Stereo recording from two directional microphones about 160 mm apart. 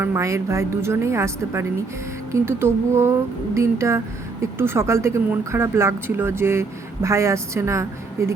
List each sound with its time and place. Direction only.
0.0 s speech: 20° right (ahead or behind)